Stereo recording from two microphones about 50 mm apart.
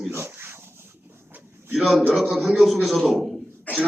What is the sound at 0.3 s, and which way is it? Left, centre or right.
Dog, right.